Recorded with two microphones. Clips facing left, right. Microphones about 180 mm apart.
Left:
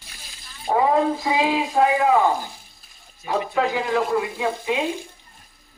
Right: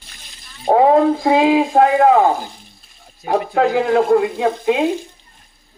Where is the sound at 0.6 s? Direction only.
60° right (ahead or behind).